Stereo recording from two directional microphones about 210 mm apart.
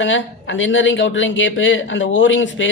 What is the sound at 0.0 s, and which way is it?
Speech, 65° left (ahead or behind).